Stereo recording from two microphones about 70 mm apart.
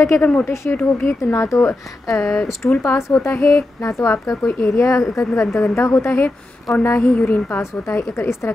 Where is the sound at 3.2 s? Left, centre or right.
Left.